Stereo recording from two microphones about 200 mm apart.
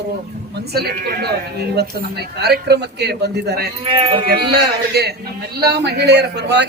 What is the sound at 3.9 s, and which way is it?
Speech, 25° right (ahead or behind).